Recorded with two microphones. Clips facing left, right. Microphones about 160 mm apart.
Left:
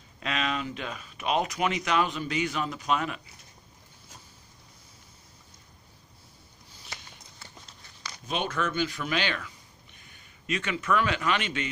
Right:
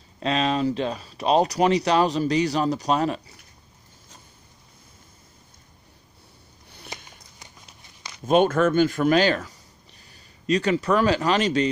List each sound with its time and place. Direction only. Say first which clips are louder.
0.2 s speech: right 8 dB; 35° right (ahead or behind)
7.3 s a sound: even; 15° right (ahead or behind)
8.3 s speech: right 12 dB; 50° right (ahead or behind)